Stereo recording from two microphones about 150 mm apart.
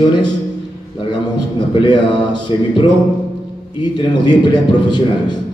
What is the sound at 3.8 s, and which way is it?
Speech, 30° left (ahead or behind).